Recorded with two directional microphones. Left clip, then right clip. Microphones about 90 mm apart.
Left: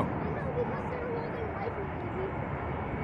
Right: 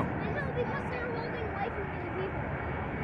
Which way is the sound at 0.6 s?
30° right (ahead or behind).